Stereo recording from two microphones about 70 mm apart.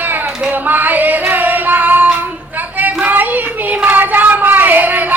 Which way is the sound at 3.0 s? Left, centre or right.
Right.